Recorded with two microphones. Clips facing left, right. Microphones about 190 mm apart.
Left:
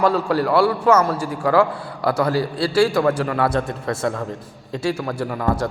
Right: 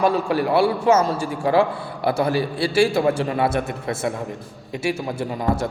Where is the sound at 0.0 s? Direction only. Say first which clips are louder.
Left 1 dB; 25° right (ahead or behind).